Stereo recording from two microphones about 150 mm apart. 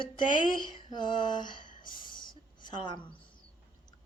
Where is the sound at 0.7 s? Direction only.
30° left (ahead or behind).